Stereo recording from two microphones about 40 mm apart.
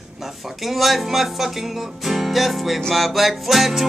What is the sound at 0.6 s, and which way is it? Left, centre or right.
Music, centre.